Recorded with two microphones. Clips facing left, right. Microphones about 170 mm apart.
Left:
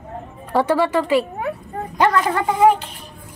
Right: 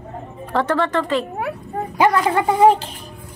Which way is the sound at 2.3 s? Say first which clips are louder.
Right 2 dB; 30° right (ahead or behind).